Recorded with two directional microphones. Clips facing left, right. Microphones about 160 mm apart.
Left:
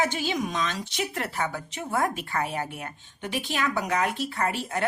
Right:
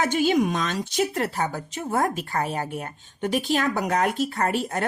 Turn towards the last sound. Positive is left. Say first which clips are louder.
# right 3 dB
turn(degrees=-45)  # may be behind; listen again after turning